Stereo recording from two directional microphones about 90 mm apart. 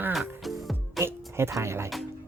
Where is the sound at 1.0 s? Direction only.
30° right (ahead or behind).